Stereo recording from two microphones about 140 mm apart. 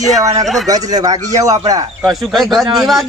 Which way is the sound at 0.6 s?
25° right (ahead or behind).